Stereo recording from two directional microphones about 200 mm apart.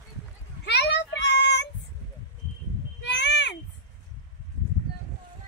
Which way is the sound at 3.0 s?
60° left (ahead or behind).